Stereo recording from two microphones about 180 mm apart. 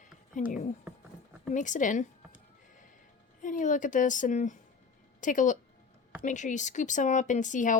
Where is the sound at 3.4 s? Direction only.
45° left (ahead or behind).